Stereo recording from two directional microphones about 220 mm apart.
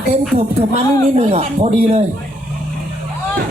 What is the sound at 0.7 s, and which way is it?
A man's voice, 30° right (ahead or behind).